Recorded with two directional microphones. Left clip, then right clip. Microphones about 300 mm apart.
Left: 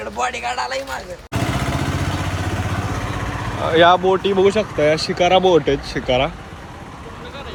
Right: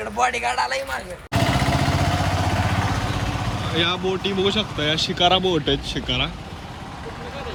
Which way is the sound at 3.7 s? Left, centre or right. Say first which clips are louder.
Left 11 dB; centre.